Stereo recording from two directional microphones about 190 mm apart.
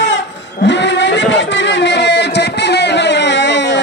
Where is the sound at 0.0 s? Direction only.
70° left (ahead or behind).